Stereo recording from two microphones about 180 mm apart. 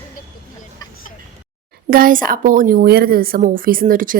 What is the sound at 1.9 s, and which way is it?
Speech, 50° right (ahead or behind).